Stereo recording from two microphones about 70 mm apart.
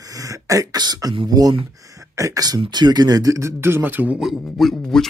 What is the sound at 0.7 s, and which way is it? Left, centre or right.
Speech, right.